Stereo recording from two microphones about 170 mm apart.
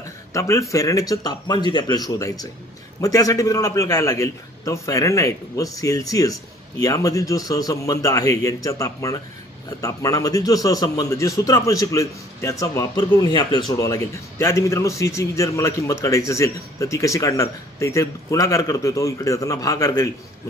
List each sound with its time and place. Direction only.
0.3 s a man's voice: 20° left (ahead or behind)